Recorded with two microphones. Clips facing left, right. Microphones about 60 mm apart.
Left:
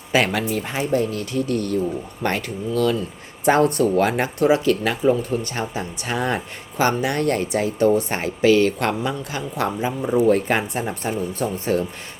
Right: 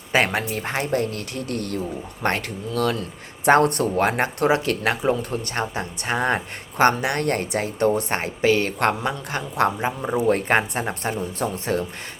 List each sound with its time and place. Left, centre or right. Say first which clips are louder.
0.1 s speech: left 1 dB; right